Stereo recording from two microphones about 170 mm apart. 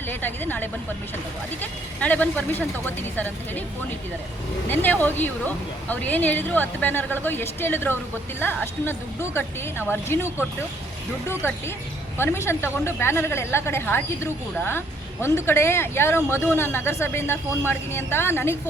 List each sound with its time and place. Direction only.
0.1 s speech: 10° left (ahead or behind)
2.0 s speech: 10° left (ahead or behind)
4.7 s speech: 10° left (ahead or behind)
11.4 s speech: 15° left (ahead or behind)